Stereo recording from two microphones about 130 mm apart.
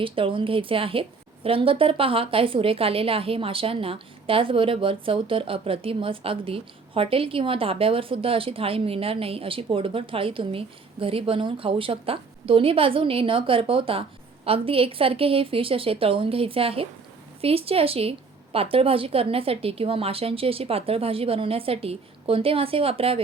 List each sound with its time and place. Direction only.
0.0 s a woman's voice: 40° right (ahead or behind)